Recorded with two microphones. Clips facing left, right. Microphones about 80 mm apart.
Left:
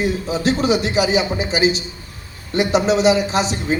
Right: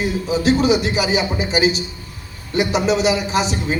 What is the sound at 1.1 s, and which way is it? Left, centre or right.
Speech, left.